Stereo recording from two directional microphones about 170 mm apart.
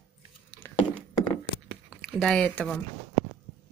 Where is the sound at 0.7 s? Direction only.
15° left (ahead or behind).